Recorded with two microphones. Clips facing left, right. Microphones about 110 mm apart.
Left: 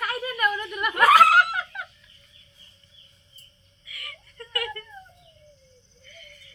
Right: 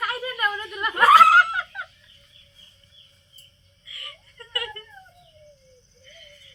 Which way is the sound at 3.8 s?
30° right (ahead or behind).